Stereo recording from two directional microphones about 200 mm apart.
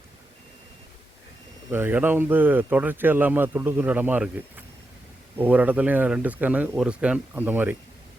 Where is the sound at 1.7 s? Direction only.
10° right (ahead or behind).